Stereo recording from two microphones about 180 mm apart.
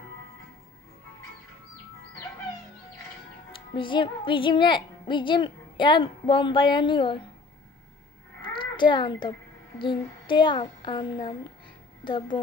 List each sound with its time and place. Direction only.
3.5 s speech: 25° left (ahead or behind)
8.4 s a sound: 25° left (ahead or behind)
9.8 s a child's voice: 25° left (ahead or behind)